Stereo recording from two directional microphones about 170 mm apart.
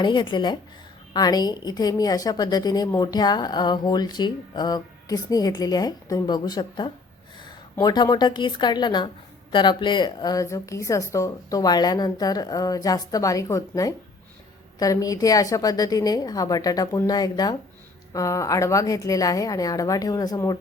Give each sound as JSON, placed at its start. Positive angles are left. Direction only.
{"t": 0.0, "sound": "a woman's voice", "side_deg": 25}